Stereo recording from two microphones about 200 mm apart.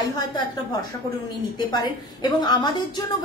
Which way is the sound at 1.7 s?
20° left (ahead or behind).